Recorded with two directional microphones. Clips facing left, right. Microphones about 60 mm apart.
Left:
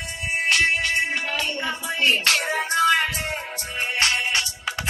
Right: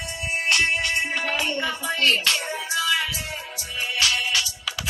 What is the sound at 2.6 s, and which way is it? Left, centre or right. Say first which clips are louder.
Music: left 6 dB; left.